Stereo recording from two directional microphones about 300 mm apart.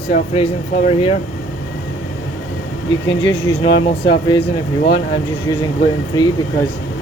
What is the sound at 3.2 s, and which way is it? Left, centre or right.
Speech, centre.